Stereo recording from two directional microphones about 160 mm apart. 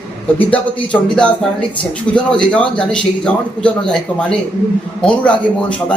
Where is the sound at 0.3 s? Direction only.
10° left (ahead or behind).